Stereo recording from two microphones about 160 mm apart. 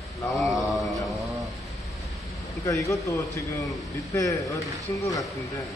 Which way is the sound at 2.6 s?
20° left (ahead or behind).